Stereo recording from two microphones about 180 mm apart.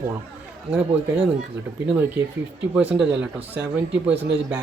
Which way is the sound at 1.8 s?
10° right (ahead or behind).